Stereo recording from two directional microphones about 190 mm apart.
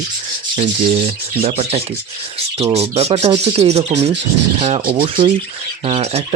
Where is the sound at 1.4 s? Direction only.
30° right (ahead or behind).